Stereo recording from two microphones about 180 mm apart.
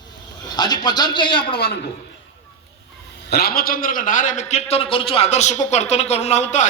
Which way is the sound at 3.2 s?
60° left (ahead or behind).